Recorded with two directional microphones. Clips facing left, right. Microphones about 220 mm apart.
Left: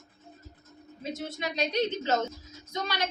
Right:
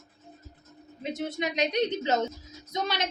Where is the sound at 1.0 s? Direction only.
20° right (ahead or behind).